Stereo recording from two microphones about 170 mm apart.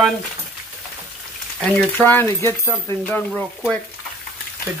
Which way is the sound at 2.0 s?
10° left (ahead or behind).